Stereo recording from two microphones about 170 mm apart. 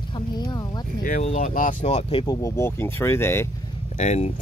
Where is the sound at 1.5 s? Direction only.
50° left (ahead or behind); by 2.3 s 30° left (ahead or behind).